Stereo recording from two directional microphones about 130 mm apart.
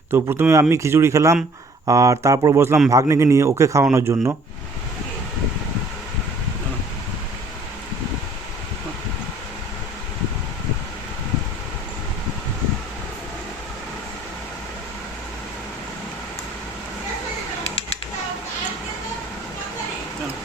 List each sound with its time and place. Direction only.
0.1 s speech: 15° right (ahead or behind)